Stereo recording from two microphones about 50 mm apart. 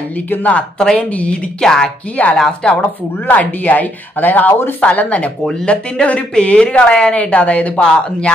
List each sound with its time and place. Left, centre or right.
0.3 s speech: left
0.9 s a woman's voice: left
1.6 s speech: centre
2.7 s speech: left
4.5 s speech: left
4.7 s a woman's voice: left
7.8 s speech: centre